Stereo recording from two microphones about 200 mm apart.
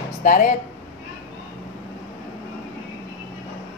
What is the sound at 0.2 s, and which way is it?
Speech, 40° left (ahead or behind).